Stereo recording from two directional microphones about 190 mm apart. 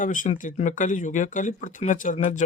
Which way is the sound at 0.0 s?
45° left (ahead or behind).